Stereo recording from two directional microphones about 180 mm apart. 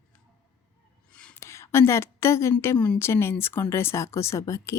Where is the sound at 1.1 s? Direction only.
5° left (ahead or behind).